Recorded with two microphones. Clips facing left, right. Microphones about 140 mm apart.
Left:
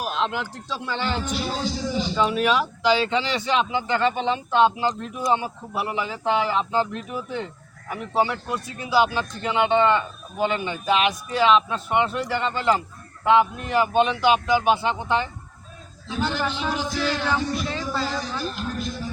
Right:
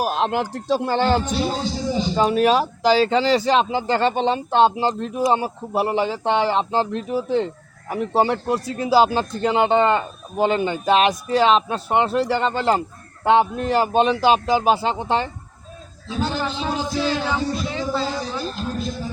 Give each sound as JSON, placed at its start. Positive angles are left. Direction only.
{"t": 0.0, "sound": "speech", "side_deg": -45}
{"t": 16.5, "sound": "music", "side_deg": -30}